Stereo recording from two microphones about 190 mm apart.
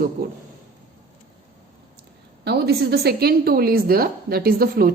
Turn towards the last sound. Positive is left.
turn(degrees=-50)  # may be behind; listen again after turning